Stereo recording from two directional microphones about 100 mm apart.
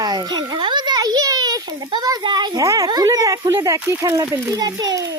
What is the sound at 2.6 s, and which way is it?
Speech, 35° right (ahead or behind).